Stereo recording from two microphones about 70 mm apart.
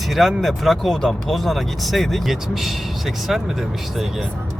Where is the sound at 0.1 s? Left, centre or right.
Centre.